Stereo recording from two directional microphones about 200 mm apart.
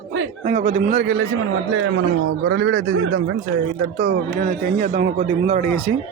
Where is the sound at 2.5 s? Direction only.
65° right (ahead or behind).